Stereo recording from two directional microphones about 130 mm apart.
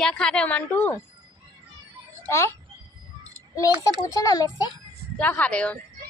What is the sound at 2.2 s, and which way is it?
Speech, 20° left (ahead or behind).